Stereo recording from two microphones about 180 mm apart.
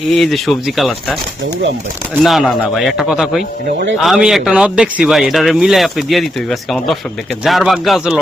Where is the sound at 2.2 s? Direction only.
Centre (ahead or behind).